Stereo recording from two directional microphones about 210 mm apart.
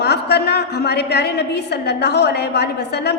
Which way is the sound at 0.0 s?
50° left (ahead or behind).